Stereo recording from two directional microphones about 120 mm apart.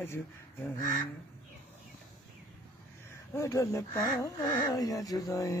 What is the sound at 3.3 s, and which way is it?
Speech, 25° left (ahead or behind).